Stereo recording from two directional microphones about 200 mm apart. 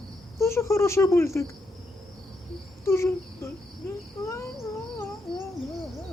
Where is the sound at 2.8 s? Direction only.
15° left (ahead or behind).